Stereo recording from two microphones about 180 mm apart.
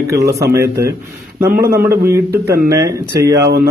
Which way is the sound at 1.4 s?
55° right (ahead or behind).